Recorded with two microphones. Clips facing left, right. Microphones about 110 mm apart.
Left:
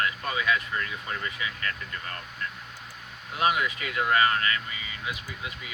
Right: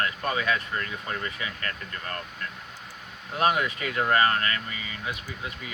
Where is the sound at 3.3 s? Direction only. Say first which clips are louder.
Right 1 dB; 35° right (ahead or behind).